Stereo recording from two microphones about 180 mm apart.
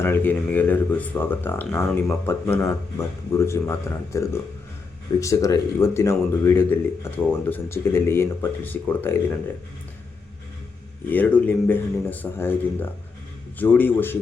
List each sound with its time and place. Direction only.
0.0 s speech: 10° left (ahead or behind)
11.1 s speech: 10° left (ahead or behind)